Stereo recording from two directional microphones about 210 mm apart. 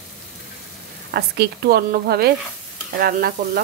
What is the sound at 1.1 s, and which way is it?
Speech, 50° right (ahead or behind).